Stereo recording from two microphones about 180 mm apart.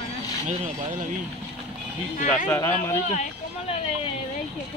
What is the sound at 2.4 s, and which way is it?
Speech, 15° left (ahead or behind).